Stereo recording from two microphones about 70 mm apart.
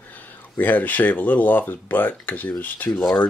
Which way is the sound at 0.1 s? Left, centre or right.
Left.